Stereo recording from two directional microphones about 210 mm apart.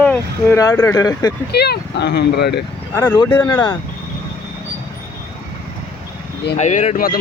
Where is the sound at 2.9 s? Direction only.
15° left (ahead or behind).